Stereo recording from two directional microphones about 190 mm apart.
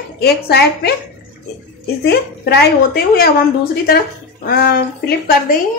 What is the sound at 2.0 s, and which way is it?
A woman's voice, 60° left (ahead or behind).